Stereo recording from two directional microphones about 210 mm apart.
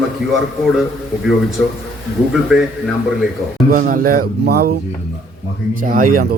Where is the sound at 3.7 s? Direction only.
40° right (ahead or behind).